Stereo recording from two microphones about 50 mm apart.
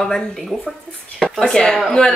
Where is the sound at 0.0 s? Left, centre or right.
Centre.